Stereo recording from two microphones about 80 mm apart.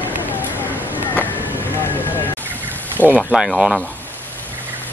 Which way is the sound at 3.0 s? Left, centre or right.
Left.